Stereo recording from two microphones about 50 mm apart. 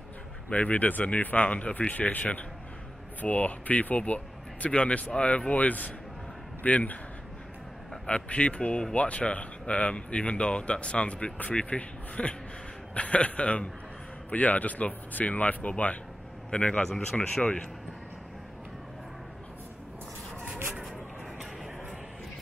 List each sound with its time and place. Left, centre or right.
0.5 s speech: left
8.1 s speech: left